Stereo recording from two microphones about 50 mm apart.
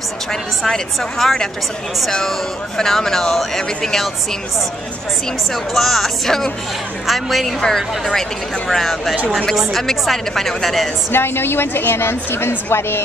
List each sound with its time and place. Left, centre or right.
0.3 s speech: centre
5.5 s a woman's voice: centre
7.6 s a woman's voice: centre
11.1 s a woman's voice: left